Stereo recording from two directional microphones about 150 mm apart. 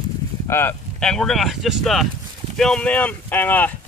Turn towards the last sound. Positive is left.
turn(degrees=10)  # may be behind; listen again after turning